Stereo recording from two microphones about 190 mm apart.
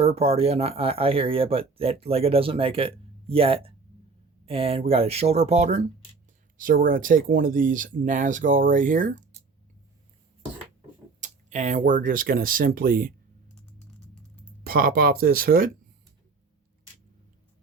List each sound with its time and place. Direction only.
0.0 s speech: 30° right (ahead or behind)
11.2 s speech: 40° right (ahead or behind)
14.6 s speech: 50° right (ahead or behind)